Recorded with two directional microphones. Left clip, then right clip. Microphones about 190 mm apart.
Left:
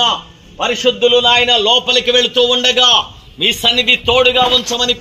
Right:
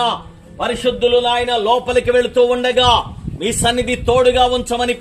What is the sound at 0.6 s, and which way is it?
A man's voice, 35° left (ahead or behind).